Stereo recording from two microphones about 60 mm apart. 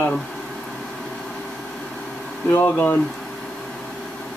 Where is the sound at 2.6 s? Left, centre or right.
Left.